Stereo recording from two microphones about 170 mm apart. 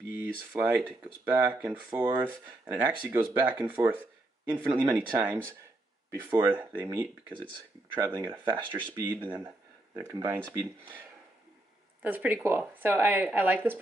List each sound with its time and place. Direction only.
0.5 s speech: 10° right (ahead or behind)
12.0 s speech: 10° right (ahead or behind)